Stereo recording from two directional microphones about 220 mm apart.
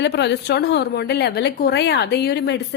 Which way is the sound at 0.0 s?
50° left (ahead or behind).